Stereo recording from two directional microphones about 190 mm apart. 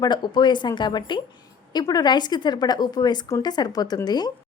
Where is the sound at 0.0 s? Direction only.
25° left (ahead or behind).